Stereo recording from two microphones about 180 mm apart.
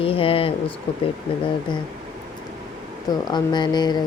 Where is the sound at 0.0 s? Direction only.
30° left (ahead or behind).